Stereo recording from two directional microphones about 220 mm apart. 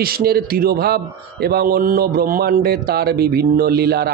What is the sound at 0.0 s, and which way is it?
A man's voice, 45° right (ahead or behind).